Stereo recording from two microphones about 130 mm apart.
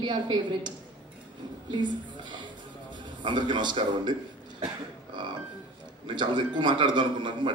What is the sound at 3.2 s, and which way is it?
Speech, 35° right (ahead or behind).